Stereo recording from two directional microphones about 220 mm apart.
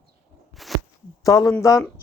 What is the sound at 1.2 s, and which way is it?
Speech, 15° left (ahead or behind).